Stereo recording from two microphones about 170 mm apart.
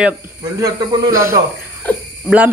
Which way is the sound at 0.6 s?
20° right (ahead or behind).